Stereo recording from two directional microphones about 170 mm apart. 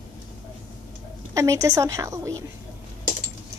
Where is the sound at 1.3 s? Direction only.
20° right (ahead or behind).